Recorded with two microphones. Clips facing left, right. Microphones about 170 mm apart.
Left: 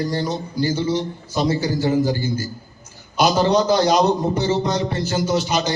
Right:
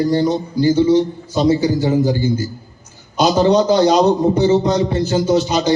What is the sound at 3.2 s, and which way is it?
A man's voice, 25° right (ahead or behind).